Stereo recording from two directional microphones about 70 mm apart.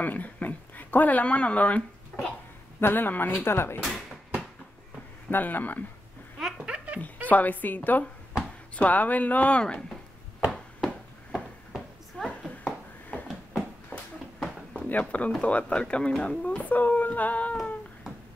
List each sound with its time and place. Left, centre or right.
0.0 s speech: left
2.1 s cough: centre
2.8 s speech: left
5.3 s speech: left
6.6 s giggle: centre
7.2 s speech: left
11.3 s a sound: centre
12.4 s a sound: centre
13.9 s a sound: left
14.9 s speech: left